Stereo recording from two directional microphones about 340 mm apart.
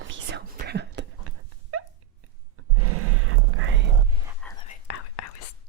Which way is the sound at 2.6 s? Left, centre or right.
Right.